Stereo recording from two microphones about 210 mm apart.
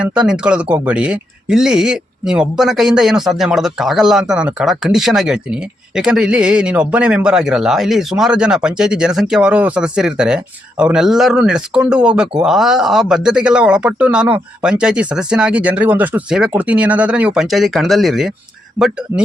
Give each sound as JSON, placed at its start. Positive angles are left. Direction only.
{"t": 0.0, "sound": "speech", "side_deg": -5}